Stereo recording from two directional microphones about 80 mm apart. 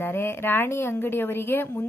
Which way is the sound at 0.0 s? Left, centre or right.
Left.